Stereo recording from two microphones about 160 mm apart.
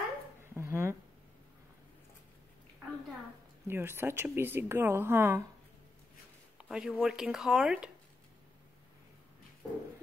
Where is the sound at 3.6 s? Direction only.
15° right (ahead or behind).